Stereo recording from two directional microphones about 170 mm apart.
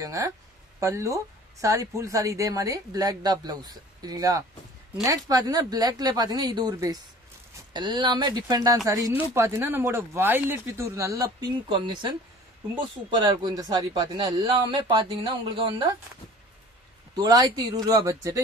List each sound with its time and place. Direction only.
0.0 s speech: 20° right (ahead or behind)
11.7 s speech: 30° right (ahead or behind)
17.1 s speech: 25° right (ahead or behind)